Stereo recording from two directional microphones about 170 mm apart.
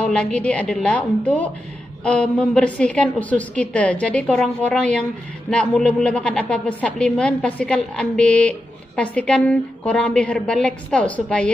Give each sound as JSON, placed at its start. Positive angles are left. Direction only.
{"t": 0.0, "sound": "a woman's voice", "side_deg": 5}